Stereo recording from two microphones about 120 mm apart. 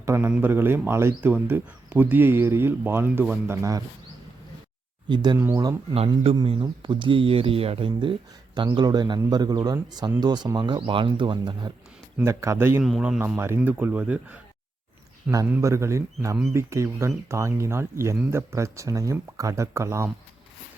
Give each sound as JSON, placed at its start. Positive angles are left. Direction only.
{"t": 0.0, "sound": "speech", "side_deg": -20}
{"t": 5.0, "sound": "speech", "side_deg": -40}
{"t": 12.1, "sound": "speech", "side_deg": -25}
{"t": 12.8, "sound": "speech", "side_deg": -5}
{"t": 13.2, "sound": "speech", "side_deg": -20}
{"t": 15.6, "sound": "speech", "side_deg": -25}